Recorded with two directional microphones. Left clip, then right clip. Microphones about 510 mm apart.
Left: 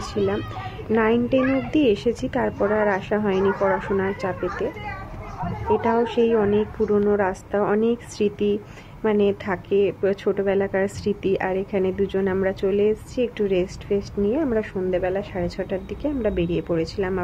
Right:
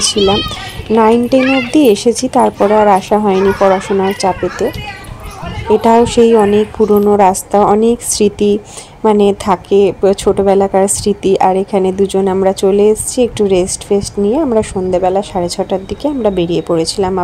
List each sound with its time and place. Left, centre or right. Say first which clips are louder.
0.1 s a child's voice: right 12 dB; left
5.7 s speech: right 12 dB; left